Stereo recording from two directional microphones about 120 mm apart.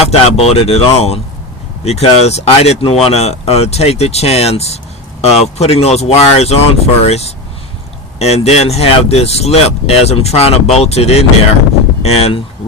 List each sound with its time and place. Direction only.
0.1 s speech: 60° left (ahead or behind)
8.4 s speech: 60° left (ahead or behind)